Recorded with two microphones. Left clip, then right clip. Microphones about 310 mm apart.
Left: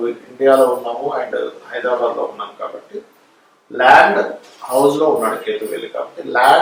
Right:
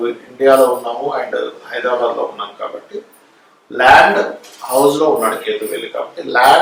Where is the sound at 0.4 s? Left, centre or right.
Centre.